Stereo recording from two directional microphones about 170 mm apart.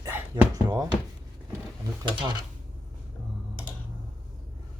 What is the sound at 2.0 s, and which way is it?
Speech, 30° right (ahead or behind).